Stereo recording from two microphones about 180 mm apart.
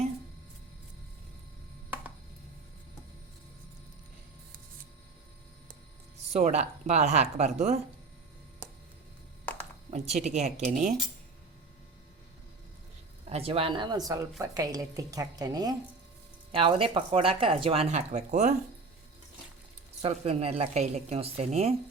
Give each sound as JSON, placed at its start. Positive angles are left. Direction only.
{"t": 6.3, "sound": "speech", "side_deg": -40}
{"t": 9.5, "sound": "a sound", "side_deg": 10}
{"t": 9.9, "sound": "speech", "side_deg": -35}
{"t": 13.2, "sound": "a woman's voice", "side_deg": -35}
{"t": 20.0, "sound": "speech", "side_deg": -35}